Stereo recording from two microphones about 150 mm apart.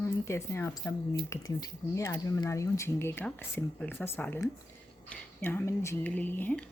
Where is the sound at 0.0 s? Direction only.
20° left (ahead or behind).